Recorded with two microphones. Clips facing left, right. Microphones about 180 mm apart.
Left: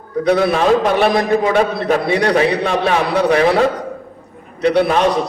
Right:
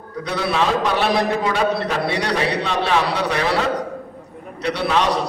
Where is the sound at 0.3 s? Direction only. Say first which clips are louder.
Left 7 dB; 50° left (ahead or behind).